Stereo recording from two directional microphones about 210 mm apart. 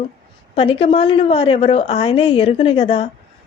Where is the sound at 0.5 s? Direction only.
25° left (ahead or behind).